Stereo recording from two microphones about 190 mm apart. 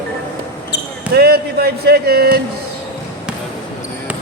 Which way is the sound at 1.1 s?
55° right (ahead or behind).